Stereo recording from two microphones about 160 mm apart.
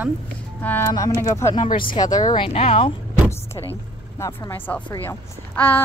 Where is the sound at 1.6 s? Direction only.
60° left (ahead or behind).